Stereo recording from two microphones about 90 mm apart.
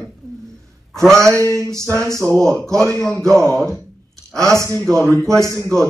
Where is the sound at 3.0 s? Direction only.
5° left (ahead or behind).